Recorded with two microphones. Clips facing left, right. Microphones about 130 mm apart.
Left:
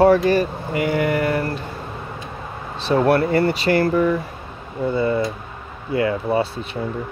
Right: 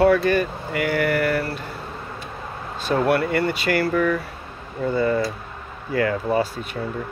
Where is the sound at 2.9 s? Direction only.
40° left (ahead or behind).